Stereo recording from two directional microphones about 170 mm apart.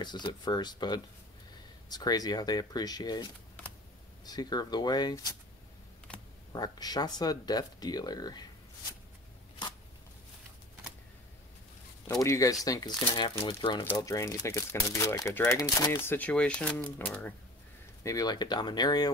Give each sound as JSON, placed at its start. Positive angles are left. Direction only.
{"t": 0.0, "sound": "speech", "side_deg": 25}
{"t": 4.3, "sound": "speech", "side_deg": 25}
{"t": 6.1, "sound": "computer keyboard", "side_deg": 5}
{"t": 6.5, "sound": "speech", "side_deg": 25}
{"t": 12.2, "sound": "speech", "side_deg": 20}
{"t": 18.0, "sound": "speech", "side_deg": 20}